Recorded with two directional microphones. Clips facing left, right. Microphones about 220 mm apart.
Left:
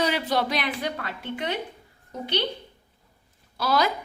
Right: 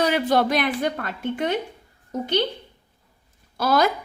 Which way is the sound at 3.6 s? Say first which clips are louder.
Right 4 dB; 50° right (ahead or behind).